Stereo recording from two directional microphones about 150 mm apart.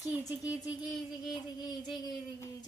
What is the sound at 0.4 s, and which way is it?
Speech, 10° right (ahead or behind).